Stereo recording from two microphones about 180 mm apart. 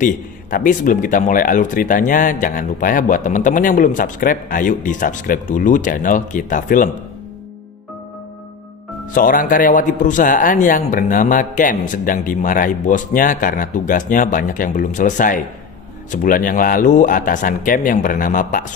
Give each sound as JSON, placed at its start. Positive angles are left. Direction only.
{"t": 0.0, "sound": "speech", "side_deg": 50}
{"t": 9.1, "sound": "speech", "side_deg": 50}